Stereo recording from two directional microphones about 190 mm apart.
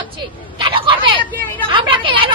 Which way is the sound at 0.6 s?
25° right (ahead or behind).